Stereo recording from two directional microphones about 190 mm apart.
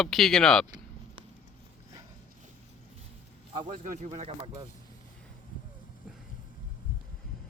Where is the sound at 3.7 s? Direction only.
45° right (ahead or behind).